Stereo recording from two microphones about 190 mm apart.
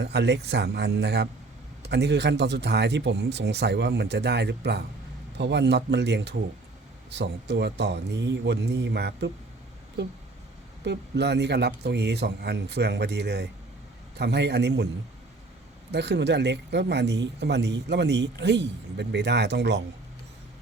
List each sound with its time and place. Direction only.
0.0 s speech: 60° right (ahead or behind)
10.8 s speech: 65° right (ahead or behind)
15.9 s speech: 65° right (ahead or behind)